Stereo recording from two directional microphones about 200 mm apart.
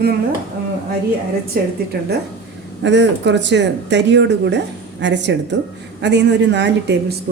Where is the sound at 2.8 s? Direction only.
60° right (ahead or behind).